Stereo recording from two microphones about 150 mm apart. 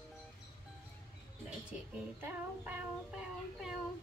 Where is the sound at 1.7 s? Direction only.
10° right (ahead or behind).